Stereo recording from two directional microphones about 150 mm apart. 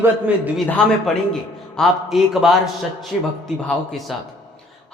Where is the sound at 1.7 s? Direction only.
Centre (ahead or behind).